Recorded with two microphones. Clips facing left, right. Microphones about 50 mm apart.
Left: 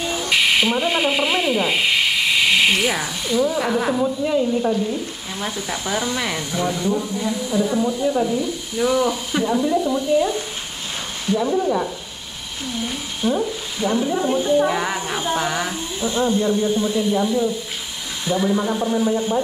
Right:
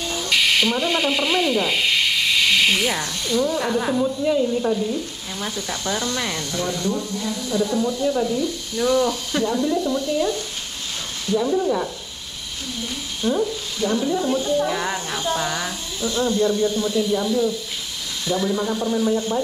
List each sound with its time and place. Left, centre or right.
0.0 s speech: centre